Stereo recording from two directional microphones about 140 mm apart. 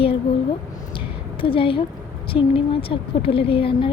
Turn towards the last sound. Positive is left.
turn(degrees=40)  # may be behind; listen again after turning